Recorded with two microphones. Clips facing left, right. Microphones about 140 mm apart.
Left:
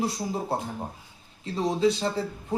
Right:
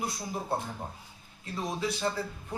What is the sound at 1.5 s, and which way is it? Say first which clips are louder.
Speech: left 9 dB; 30° left (ahead or behind).